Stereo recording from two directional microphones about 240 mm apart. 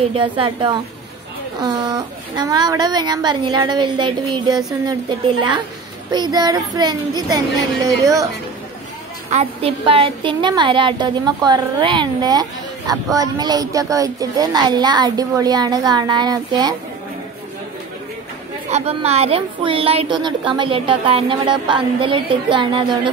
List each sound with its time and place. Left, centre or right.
0.1 s a woman's voice: right
6.1 s a woman's voice: centre
9.3 s a woman's voice: right
18.7 s a woman's voice: right